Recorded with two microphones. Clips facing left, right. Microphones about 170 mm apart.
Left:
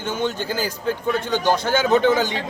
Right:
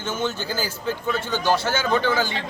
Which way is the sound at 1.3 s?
15° left (ahead or behind).